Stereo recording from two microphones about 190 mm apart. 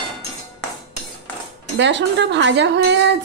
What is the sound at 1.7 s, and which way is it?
Speech, 70° right (ahead or behind).